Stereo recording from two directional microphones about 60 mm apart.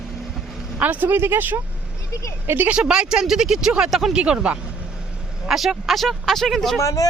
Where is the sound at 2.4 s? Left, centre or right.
Right.